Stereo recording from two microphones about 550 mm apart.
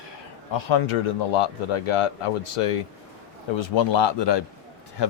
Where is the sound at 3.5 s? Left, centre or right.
Left.